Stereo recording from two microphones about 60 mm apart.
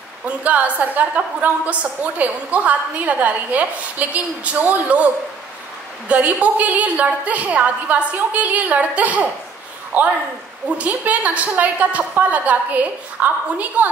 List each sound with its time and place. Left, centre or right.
0.4 s a woman's voice: right